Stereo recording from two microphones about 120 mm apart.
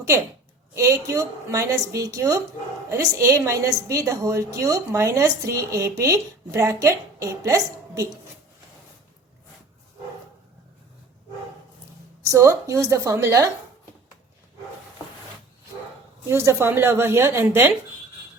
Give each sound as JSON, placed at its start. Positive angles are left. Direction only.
{"t": 0.8, "sound": "a woman's voice", "side_deg": -25}
{"t": 12.2, "sound": "a woman's voice", "side_deg": -25}
{"t": 16.2, "sound": "a woman's voice", "side_deg": -20}